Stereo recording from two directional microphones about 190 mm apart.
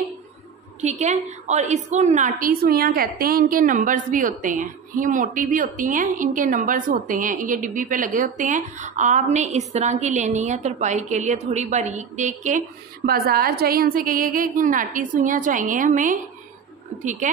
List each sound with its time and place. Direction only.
0.7 s a woman's voice: 35° right (ahead or behind)